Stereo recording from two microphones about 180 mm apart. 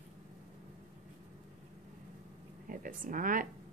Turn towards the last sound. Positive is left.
turn(degrees=-50)  # may be behind; listen again after turning